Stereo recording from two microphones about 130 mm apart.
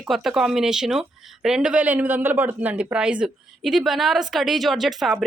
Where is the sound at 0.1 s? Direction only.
5° right (ahead or behind).